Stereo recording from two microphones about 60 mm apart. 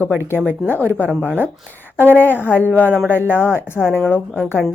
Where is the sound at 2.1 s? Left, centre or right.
Left.